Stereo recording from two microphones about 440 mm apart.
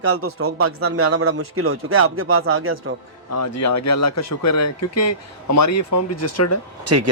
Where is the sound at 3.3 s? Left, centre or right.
Left.